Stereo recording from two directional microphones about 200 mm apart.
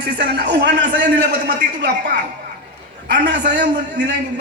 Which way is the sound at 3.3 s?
60° right (ahead or behind).